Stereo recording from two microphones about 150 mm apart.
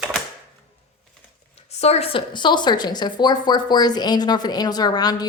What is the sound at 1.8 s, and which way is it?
A woman's voice, 45° left (ahead or behind).